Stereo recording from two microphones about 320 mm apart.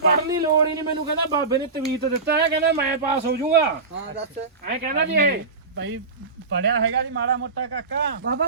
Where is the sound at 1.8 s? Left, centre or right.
Right.